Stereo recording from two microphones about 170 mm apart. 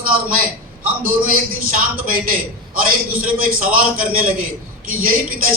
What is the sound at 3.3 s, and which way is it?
Speech, 55° right (ahead or behind).